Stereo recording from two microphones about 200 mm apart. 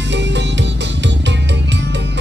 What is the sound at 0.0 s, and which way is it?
Music, 60° right (ahead or behind).